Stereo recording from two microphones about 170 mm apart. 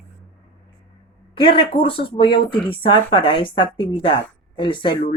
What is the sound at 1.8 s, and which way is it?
A woman's voice, 30° left (ahead or behind).